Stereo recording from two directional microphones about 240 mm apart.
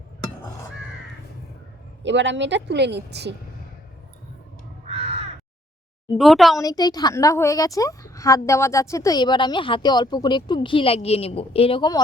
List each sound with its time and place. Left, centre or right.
2.0 s a woman's voice: right
4.9 s crow: right
6.1 s speech: centre
6.6 s a woman's voice: centre